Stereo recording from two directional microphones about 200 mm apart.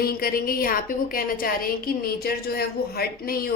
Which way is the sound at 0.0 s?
50° left (ahead or behind).